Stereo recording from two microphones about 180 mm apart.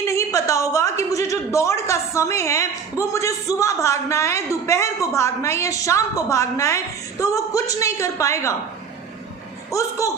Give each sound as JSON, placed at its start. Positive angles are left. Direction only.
{"t": 0.0, "sound": "a sound", "side_deg": 15}
{"t": 3.0, "sound": "a man's voice", "side_deg": 15}
{"t": 9.7, "sound": "speech", "side_deg": 20}